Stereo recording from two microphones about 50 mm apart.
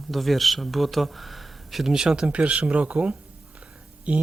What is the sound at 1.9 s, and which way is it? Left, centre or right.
Speech, centre.